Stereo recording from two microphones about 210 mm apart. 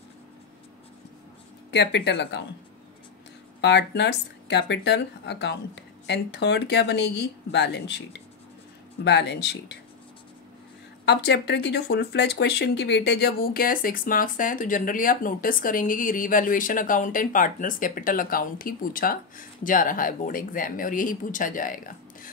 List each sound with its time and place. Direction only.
1.7 s speech: 55° left (ahead or behind)
3.6 s speech: 55° left (ahead or behind)
11.1 s speech: 55° left (ahead or behind)